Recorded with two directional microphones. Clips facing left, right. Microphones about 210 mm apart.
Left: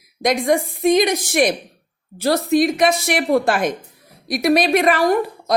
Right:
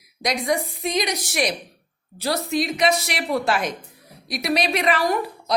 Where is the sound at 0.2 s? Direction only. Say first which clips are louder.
Left 6 dB; 50° left (ahead or behind).